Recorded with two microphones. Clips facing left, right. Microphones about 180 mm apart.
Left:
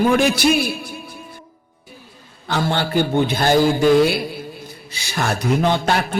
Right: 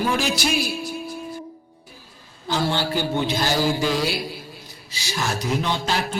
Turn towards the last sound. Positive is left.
turn(degrees=60)  # may be behind; listen again after turning